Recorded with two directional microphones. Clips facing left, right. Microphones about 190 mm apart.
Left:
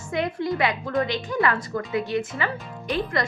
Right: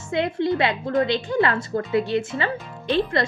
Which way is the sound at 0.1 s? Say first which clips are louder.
Right 3 dB; 25° right (ahead or behind).